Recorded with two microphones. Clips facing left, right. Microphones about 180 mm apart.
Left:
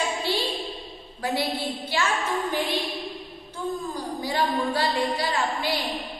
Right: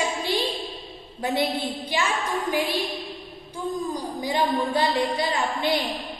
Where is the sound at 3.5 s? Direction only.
15° right (ahead or behind).